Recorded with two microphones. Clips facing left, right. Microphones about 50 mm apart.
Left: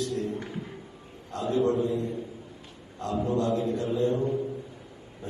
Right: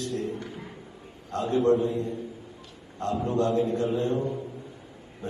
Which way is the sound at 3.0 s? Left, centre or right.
Right.